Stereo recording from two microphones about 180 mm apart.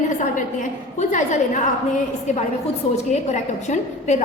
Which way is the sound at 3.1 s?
40° left (ahead or behind).